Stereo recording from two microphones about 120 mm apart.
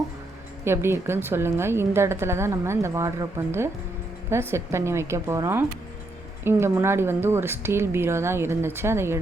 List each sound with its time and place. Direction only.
0.6 s a woman's voice: 20° right (ahead or behind)